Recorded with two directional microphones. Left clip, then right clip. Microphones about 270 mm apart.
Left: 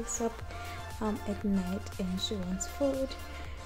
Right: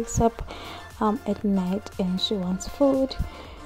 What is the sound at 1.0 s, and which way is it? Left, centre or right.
Speech, right.